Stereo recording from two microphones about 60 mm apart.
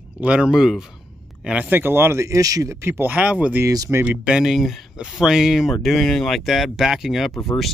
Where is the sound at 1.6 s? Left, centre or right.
Right.